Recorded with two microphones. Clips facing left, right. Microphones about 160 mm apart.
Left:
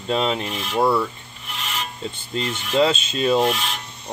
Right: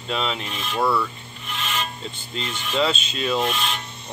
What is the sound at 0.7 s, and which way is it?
Speech, 20° left (ahead or behind).